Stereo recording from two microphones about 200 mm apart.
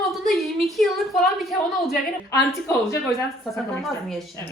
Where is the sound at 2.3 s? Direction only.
15° left (ahead or behind).